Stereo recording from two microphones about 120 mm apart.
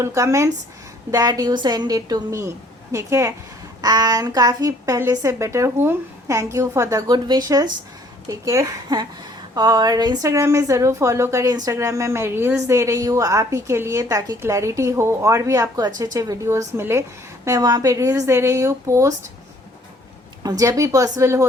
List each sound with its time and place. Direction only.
0.0 s a woman's voice: 25° right (ahead or behind)
20.4 s a woman's voice: 30° right (ahead or behind)